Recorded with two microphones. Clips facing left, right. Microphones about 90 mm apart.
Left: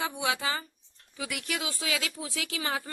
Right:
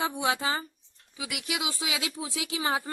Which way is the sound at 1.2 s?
10° right (ahead or behind).